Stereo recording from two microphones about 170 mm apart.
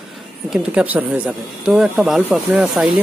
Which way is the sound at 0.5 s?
5° right (ahead or behind).